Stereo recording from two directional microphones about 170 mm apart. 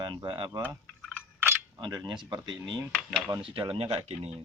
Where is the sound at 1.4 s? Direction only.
10° right (ahead or behind).